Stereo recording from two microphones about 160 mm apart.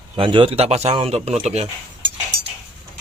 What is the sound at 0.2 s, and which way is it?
A man's voice, 35° right (ahead or behind).